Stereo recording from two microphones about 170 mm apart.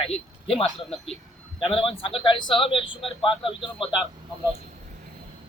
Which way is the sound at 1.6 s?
30° left (ahead or behind).